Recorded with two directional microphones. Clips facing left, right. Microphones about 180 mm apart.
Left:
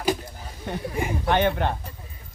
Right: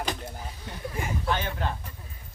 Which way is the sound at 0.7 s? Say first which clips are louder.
Left 14 dB; 60° left (ahead or behind).